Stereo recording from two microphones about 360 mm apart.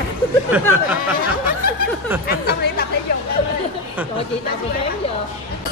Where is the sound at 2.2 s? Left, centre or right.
Left.